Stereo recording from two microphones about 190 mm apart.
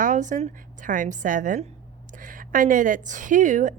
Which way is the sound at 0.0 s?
40° right (ahead or behind).